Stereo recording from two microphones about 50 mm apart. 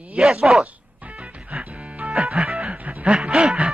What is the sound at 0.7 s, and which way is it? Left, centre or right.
Music, right.